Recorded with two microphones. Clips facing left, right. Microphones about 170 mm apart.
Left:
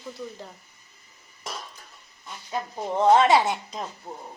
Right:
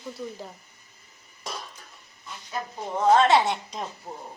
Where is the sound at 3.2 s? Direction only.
10° left (ahead or behind).